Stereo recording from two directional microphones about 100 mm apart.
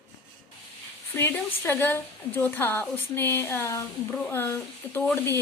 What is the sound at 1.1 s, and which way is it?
Speech, 20° left (ahead or behind).